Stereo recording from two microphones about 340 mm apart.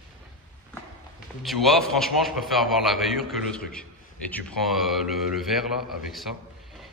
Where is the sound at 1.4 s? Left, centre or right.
Centre.